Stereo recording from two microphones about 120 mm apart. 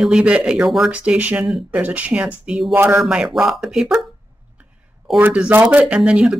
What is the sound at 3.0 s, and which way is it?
Speech, 5° right (ahead or behind).